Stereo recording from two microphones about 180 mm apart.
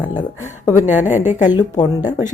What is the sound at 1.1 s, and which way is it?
Speech, 40° left (ahead or behind).